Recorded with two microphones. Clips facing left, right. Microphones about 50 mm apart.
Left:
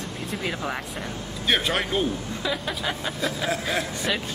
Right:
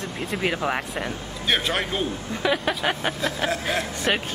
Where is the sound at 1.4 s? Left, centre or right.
Centre.